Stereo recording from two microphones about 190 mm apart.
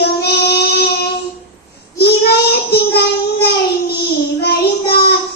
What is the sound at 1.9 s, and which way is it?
Child singing, 55° left (ahead or behind).